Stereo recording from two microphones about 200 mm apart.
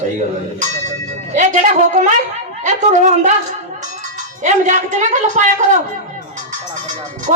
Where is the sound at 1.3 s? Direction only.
40° right (ahead or behind).